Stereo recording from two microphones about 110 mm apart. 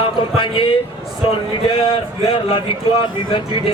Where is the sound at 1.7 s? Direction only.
55° left (ahead or behind).